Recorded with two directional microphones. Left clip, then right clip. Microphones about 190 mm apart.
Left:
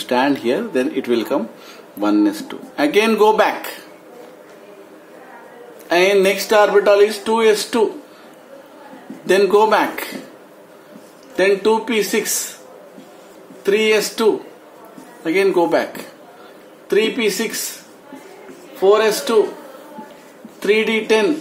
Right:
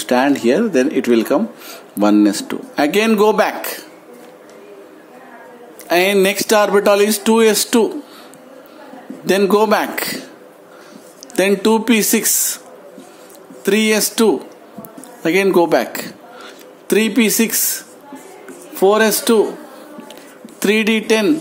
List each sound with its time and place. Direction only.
0.0 s speech: 30° right (ahead or behind)
5.9 s speech: 40° right (ahead or behind); by 7.8 s 55° right (ahead or behind)
9.2 s speech: 40° right (ahead or behind)
11.3 s speech: 55° right (ahead or behind)
13.7 s speech: 55° right (ahead or behind)
15.2 s speech: 45° right (ahead or behind)
16.8 s speech: 60° right (ahead or behind)
18.8 s speech: 60° right (ahead or behind)
20.5 s speech: 55° right (ahead or behind)